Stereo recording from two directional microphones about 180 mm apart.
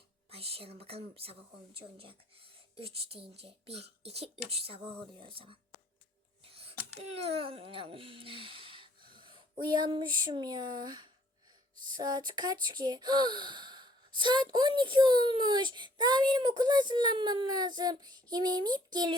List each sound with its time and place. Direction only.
0.3 s a child's voice: 35° right (ahead or behind)